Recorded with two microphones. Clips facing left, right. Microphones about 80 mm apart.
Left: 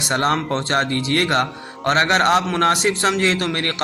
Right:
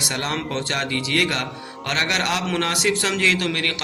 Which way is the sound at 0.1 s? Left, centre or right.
Left.